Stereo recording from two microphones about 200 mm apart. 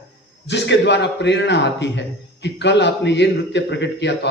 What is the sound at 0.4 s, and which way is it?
A man's voice, 60° left (ahead or behind).